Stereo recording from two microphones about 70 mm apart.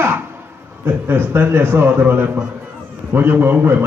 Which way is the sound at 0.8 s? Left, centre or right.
Right.